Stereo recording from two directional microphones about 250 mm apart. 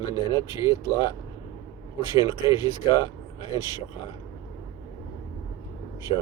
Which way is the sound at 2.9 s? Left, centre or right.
Centre.